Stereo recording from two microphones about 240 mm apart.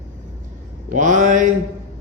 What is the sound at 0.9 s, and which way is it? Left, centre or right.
Speech, right.